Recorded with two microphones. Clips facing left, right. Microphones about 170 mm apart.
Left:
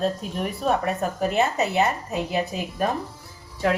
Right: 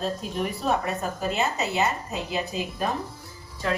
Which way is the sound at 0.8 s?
55° left (ahead or behind).